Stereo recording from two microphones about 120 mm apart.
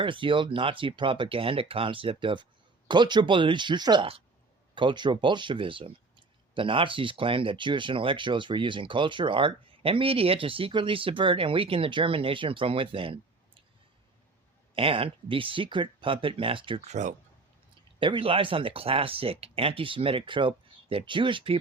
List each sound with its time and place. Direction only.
0.0 s speech: 45° right (ahead or behind)
14.8 s speech: 50° right (ahead or behind)
16.8 s speech: 80° right
18.0 s speech: 45° right (ahead or behind)